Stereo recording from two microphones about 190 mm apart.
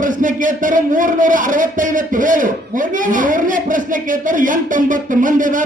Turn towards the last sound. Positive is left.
turn(degrees=-45)  # may be behind; listen again after turning